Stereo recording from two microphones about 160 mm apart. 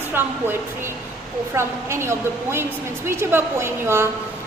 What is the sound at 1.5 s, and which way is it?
A woman's voice, 15° right (ahead or behind).